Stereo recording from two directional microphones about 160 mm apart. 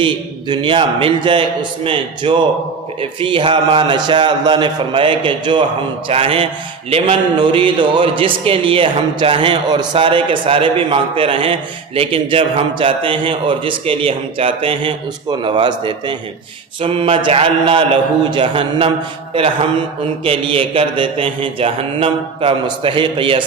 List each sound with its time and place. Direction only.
0.0 s speech: 30° right (ahead or behind)
20.2 s speech: 35° right (ahead or behind)